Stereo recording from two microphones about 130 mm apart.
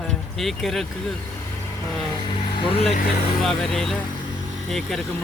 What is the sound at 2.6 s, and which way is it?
Speech, 50° left (ahead or behind).